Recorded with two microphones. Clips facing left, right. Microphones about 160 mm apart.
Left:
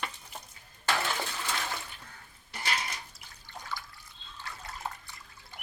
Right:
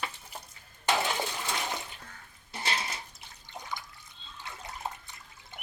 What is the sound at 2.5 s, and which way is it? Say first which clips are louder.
Water: right 1 dB; 25° right (ahead or behind).